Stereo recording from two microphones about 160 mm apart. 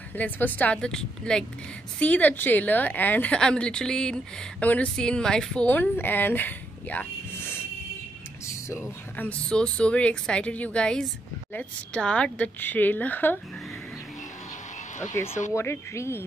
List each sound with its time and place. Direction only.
0.1 s speech: 10° left (ahead or behind)
9.1 s speech: 10° left (ahead or behind)
15.2 s speech: 50° left (ahead or behind)
15.5 s speech: 15° left (ahead or behind)